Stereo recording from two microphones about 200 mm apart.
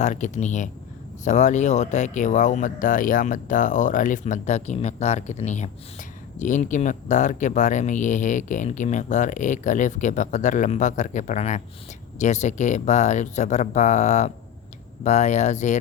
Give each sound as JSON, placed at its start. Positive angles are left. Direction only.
{"t": 0.0, "sound": "speech", "side_deg": 35}